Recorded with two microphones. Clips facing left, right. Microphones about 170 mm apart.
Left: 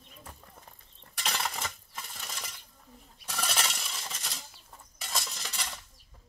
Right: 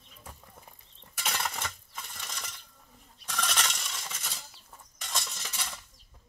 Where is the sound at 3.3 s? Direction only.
5° left (ahead or behind).